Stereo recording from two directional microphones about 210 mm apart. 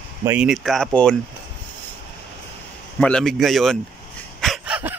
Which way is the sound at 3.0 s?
5° left (ahead or behind).